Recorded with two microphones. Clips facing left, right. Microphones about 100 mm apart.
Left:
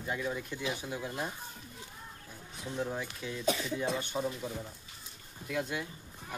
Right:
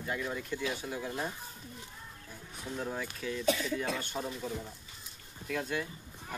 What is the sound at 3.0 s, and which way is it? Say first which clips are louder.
Speech: right 2 dB; 15° left (ahead or behind).